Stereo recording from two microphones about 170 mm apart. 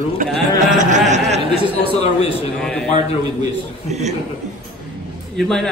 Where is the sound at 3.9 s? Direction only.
40° right (ahead or behind).